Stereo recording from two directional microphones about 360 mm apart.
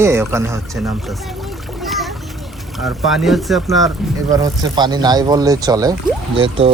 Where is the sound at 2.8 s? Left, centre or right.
Centre.